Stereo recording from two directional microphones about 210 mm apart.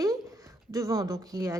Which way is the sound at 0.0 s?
15° right (ahead or behind).